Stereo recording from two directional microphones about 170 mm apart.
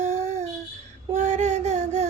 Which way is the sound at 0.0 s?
45° right (ahead or behind).